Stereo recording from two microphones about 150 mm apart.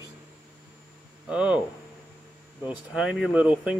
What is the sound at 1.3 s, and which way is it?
Speech, 10° right (ahead or behind).